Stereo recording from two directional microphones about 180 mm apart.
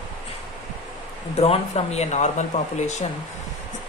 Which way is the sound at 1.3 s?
35° left (ahead or behind).